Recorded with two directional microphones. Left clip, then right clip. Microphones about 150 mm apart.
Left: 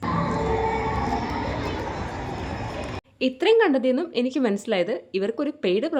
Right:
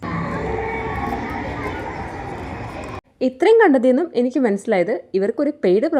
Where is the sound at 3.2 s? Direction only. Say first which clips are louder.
Right 6 dB; 35° right (ahead or behind).